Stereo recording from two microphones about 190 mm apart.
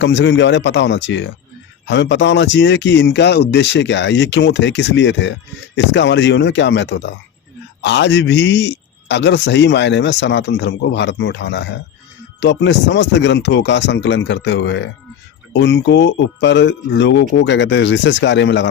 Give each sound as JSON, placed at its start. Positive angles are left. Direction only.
{"t": 0.0, "sound": "speech", "side_deg": 70}